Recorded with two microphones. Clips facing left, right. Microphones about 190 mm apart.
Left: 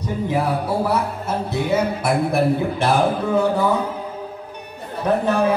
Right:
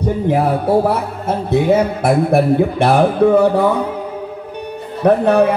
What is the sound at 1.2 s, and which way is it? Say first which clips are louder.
Speech: right 8 dB; 55° right (ahead or behind).